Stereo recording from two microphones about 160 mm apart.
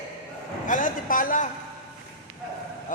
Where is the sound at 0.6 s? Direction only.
55° left (ahead or behind).